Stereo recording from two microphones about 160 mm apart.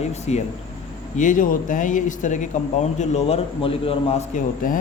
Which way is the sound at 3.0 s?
40° left (ahead or behind).